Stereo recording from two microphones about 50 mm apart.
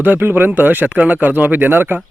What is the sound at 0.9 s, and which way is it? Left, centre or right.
Speech, right.